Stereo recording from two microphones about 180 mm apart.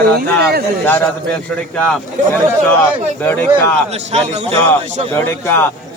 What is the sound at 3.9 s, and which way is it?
Speech, 35° right (ahead or behind).